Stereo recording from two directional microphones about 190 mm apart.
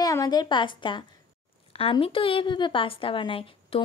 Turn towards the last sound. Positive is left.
turn(degrees=30)  # may be behind; listen again after turning